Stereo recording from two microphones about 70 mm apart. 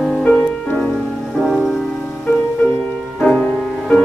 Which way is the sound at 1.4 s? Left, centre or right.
Centre.